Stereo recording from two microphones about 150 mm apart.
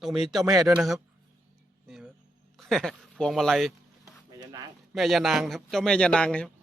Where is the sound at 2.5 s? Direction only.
Centre (ahead or behind).